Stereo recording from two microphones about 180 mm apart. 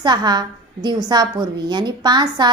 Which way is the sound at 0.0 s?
25° right (ahead or behind).